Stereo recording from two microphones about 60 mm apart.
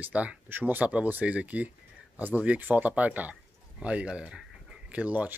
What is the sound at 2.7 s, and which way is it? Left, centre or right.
Speech, right.